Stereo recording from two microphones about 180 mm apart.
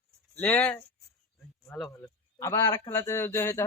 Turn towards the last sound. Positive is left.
turn(degrees=15)  # may be behind; listen again after turning